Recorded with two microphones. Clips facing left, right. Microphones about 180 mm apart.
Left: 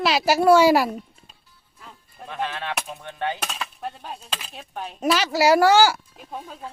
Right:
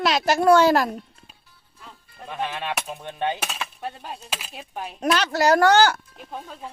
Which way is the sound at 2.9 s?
20° right (ahead or behind).